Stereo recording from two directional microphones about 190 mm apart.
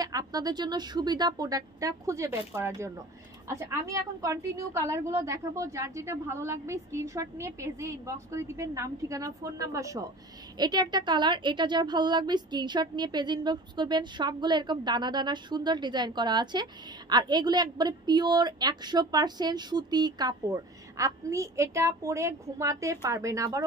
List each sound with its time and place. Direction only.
0.0 s a woman's voice: 20° right (ahead or behind)